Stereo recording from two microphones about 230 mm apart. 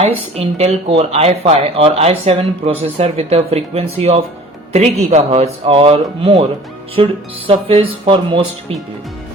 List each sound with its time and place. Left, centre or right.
0.0 s speech: right